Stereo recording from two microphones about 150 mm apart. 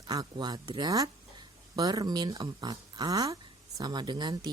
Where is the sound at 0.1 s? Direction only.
25° right (ahead or behind).